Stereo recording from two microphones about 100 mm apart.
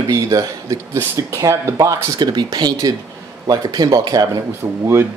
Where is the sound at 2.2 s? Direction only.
45° right (ahead or behind).